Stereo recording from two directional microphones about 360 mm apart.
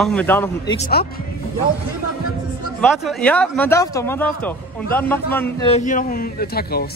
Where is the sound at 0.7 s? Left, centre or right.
Left.